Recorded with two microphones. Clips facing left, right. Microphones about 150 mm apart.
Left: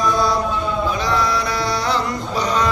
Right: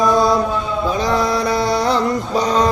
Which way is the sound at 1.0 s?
45° right (ahead or behind).